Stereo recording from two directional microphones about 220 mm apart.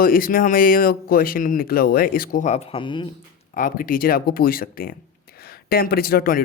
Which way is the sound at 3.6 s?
40° left (ahead or behind).